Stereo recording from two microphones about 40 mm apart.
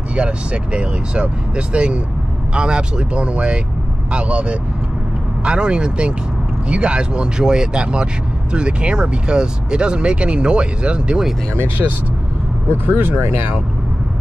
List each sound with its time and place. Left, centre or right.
0.1 s speech: right
11.8 s speech: centre
12.7 s speech: right